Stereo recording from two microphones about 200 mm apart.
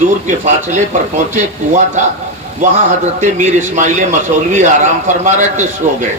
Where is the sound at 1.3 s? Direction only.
40° right (ahead or behind).